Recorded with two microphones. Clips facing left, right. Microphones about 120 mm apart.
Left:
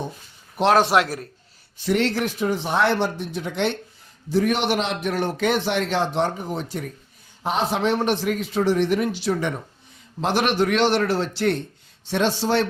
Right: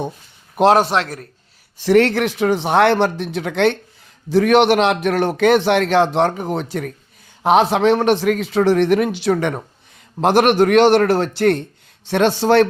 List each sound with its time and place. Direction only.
1.0 s a man's voice: 30° left (ahead or behind)
1.8 s a man's voice: 65° right (ahead or behind)
10.2 s a man's voice: 55° right (ahead or behind)